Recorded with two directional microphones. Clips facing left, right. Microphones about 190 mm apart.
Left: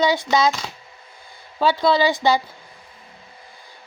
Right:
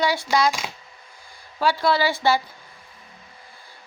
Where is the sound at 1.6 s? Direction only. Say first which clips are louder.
Left 3 dB; 20° left (ahead or behind).